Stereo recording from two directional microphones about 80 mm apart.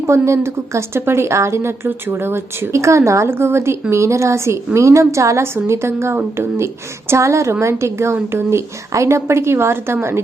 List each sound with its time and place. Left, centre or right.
0.0 s a woman's voice: right